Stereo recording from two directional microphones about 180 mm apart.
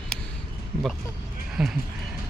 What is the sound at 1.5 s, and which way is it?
Speech, centre (ahead or behind).